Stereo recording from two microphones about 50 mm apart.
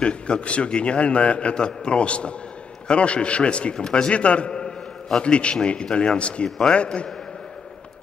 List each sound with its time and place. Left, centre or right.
0.0 s a man's voice: left